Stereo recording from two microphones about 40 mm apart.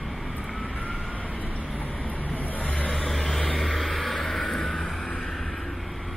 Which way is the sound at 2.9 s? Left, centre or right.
Centre.